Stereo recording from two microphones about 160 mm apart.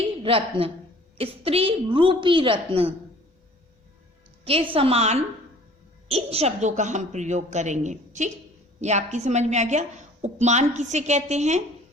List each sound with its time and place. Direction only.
0.2 s a woman's voice: 35° right (ahead or behind)
4.4 s a woman's voice: 35° right (ahead or behind)